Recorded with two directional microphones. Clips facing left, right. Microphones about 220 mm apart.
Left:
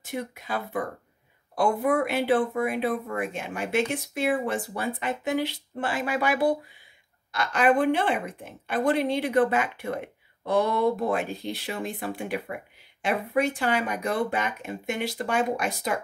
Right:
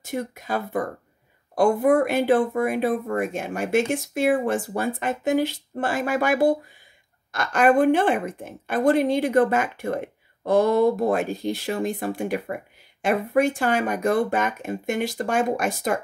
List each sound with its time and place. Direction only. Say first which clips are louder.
0.1 s a woman's voice: right 4 dB; 45° right (ahead or behind)